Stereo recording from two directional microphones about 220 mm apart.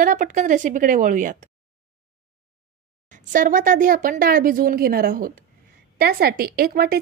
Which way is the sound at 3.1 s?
40° right (ahead or behind).